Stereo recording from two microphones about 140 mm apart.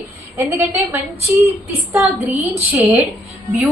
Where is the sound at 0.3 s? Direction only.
20° right (ahead or behind).